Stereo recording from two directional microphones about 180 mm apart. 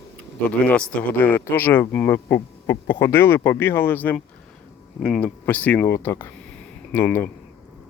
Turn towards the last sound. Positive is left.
turn(degrees=15)  # may be behind; listen again after turning